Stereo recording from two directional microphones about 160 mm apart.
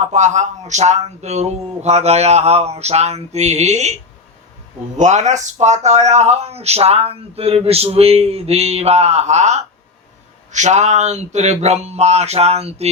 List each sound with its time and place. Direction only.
0.1 s speech: 50° right (ahead or behind)
4.9 s speech: 45° right (ahead or behind)